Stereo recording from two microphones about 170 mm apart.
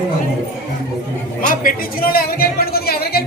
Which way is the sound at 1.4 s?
55° left (ahead or behind).